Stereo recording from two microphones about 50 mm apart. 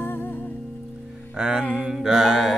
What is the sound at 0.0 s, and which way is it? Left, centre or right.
Music, left.